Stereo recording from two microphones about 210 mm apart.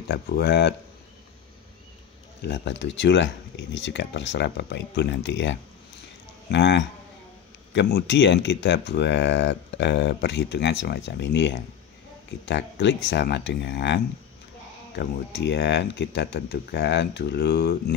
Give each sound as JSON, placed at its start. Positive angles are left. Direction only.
{"t": 0.1, "sound": "speech", "side_deg": 50}
{"t": 2.4, "sound": "speech", "side_deg": 55}